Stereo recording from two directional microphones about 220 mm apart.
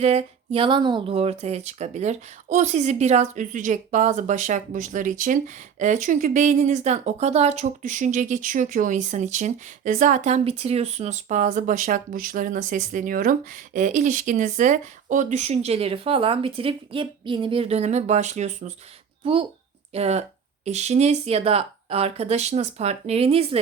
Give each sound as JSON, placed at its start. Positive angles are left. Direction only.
{"t": 0.0, "sound": "speech", "side_deg": -30}